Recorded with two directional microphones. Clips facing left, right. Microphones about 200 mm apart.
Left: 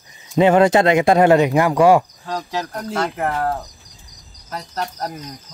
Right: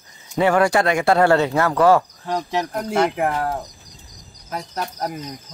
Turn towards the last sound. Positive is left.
turn(degrees=-15)  # may be behind; listen again after turning